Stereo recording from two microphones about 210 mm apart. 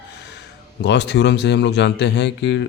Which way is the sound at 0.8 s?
55° left (ahead or behind).